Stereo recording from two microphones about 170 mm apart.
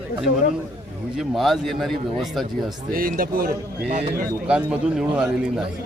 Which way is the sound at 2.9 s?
55° right (ahead or behind).